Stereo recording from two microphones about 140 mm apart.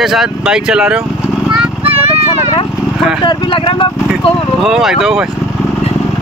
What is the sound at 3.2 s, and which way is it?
Speech, 35° left (ahead or behind).